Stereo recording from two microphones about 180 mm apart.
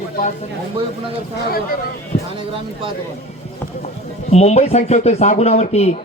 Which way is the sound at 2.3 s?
30° right (ahead or behind).